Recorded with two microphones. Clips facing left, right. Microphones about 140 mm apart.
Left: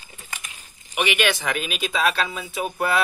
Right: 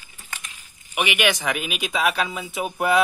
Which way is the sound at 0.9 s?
10° right (ahead or behind).